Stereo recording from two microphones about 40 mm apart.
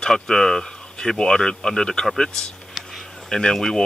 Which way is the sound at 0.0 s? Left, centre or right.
Centre.